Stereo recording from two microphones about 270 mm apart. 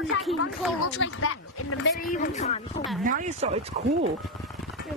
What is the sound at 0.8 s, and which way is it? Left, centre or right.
Speech, left.